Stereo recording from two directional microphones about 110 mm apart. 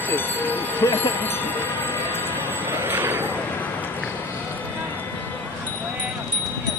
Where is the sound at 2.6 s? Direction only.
20° right (ahead or behind).